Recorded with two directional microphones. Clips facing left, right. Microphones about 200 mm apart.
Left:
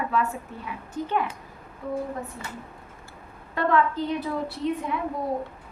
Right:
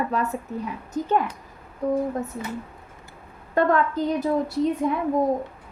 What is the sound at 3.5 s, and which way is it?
A woman's voice, 45° right (ahead or behind).